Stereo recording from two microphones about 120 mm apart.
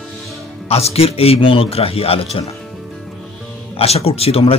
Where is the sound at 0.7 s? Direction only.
60° left (ahead or behind).